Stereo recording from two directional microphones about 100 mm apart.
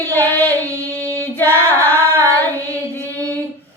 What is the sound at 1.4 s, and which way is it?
Female singing, 20° left (ahead or behind).